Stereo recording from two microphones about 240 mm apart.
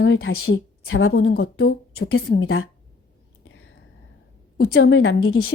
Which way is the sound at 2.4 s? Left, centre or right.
Left.